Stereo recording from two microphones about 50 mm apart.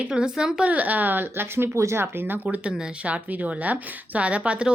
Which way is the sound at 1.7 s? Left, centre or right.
Right.